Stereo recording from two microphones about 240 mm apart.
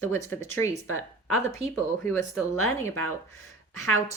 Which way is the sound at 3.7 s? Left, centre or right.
Left.